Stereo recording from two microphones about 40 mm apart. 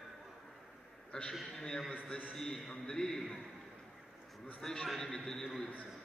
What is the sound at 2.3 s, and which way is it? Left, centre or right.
Speech, centre.